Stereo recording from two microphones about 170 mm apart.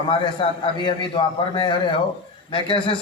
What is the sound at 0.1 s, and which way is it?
A man's voice, 30° left (ahead or behind).